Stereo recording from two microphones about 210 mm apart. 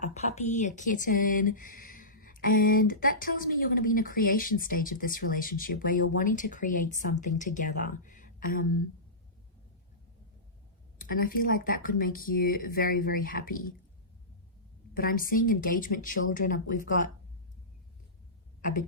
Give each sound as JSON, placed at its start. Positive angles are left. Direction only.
{"t": 0.0, "sound": "speech", "side_deg": 35}
{"t": 10.9, "sound": "speech", "side_deg": 40}
{"t": 14.9, "sound": "speech", "side_deg": 45}
{"t": 18.6, "sound": "a sound", "side_deg": 40}